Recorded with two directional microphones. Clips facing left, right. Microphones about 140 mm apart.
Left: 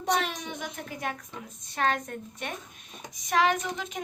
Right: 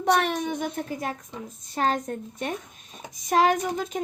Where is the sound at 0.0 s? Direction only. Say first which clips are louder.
Right 6 dB; 55° right (ahead or behind).